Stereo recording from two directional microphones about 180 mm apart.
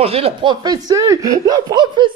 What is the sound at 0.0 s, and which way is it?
Speech, 35° right (ahead or behind).